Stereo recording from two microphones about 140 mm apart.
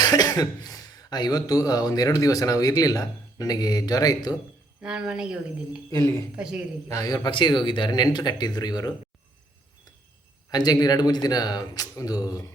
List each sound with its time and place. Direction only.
0.0 s a man's voice: 30° left (ahead or behind)
4.8 s speech: 5° right (ahead or behind)
6.8 s speech: 25° left (ahead or behind)
10.5 s speech: 30° left (ahead or behind)